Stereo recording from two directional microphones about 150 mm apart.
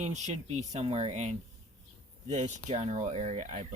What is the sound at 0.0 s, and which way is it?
Speech, 50° right (ahead or behind).